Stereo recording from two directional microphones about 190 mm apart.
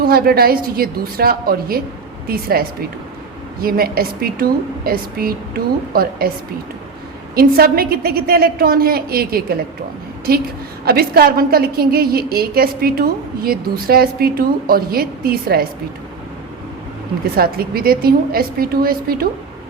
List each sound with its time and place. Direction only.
0.0 s a woman's voice: 50° right (ahead or behind)
7.3 s a woman's voice: 50° right (ahead or behind)
10.8 s a woman's voice: 55° right (ahead or behind)
17.3 s a woman's voice: 50° right (ahead or behind)